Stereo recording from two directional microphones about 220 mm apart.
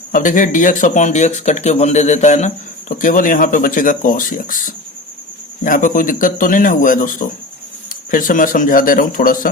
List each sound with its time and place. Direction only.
0.1 s speech: 35° left (ahead or behind)